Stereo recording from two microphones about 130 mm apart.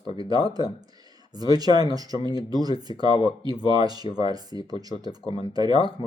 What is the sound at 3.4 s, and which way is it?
Speech, 35° right (ahead or behind).